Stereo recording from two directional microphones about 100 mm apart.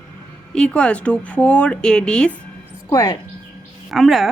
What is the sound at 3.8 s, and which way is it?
Speech, centre (ahead or behind).